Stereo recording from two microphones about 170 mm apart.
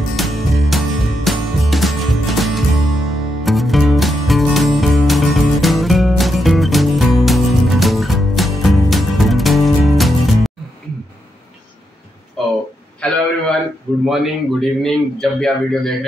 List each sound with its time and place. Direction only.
0.1 s music: centre (ahead or behind)
12.4 s a sound: centre (ahead or behind)
14.0 s a man's voice: centre (ahead or behind)